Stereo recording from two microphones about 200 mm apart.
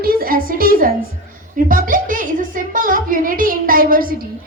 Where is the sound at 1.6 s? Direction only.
45° right (ahead or behind).